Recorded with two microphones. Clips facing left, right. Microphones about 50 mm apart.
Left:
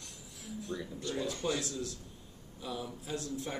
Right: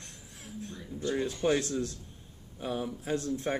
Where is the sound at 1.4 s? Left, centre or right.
Right.